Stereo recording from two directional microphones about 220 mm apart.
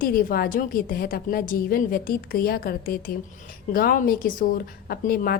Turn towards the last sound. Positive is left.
turn(degrees=40)  # may be behind; listen again after turning